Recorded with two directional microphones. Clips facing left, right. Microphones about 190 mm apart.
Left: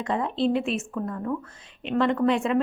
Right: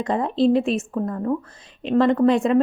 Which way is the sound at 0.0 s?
40° right (ahead or behind).